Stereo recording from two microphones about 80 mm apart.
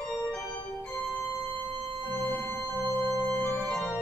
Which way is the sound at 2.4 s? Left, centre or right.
Left.